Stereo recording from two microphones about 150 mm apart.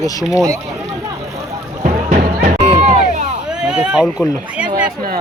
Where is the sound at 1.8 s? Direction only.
60° right (ahead or behind).